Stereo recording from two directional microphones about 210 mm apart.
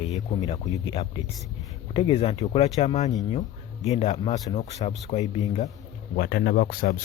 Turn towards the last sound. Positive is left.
turn(degrees=45)  # may be behind; listen again after turning